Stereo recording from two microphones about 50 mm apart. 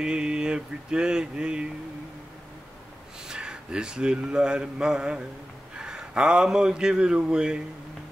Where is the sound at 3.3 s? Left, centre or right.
Centre.